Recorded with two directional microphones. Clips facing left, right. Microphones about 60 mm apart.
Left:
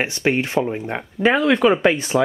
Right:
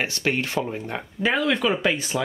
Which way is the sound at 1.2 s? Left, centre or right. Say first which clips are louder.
Left 6 dB; left.